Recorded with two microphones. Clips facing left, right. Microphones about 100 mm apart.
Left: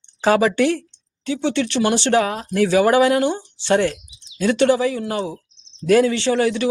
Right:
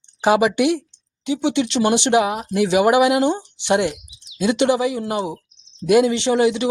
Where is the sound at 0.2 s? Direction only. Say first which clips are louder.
Even; 15° right (ahead or behind).